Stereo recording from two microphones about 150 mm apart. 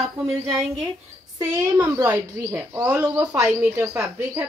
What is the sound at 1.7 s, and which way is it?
Speech, 20° right (ahead or behind).